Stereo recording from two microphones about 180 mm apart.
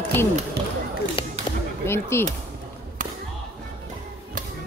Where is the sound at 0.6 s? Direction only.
65° right (ahead or behind).